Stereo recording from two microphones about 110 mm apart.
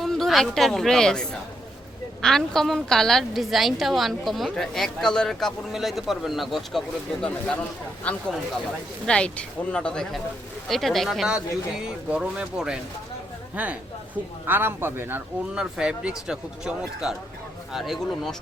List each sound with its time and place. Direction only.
0.0 s a woman's voice: centre (ahead or behind); by 15.2 s 20° right (ahead or behind)
15.5 s a woman's voice: 5° right (ahead or behind)